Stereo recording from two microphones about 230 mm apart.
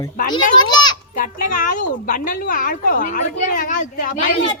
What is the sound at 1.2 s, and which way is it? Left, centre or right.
A woman's voice, left.